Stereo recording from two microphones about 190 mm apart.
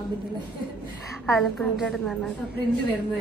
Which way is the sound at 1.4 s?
Centre (ahead or behind).